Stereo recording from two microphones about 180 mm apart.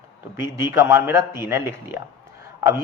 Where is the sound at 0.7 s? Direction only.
15° right (ahead or behind).